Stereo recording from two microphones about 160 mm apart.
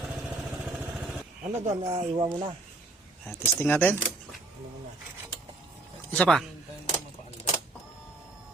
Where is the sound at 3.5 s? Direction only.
10° left (ahead or behind).